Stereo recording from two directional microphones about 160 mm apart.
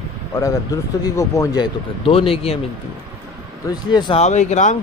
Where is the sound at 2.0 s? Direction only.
35° left (ahead or behind).